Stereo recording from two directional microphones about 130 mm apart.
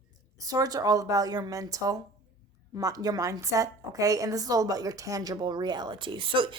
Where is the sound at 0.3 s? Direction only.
30° right (ahead or behind).